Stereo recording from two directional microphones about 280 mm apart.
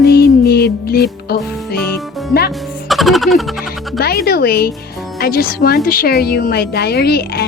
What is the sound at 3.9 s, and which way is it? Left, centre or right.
Speech, left.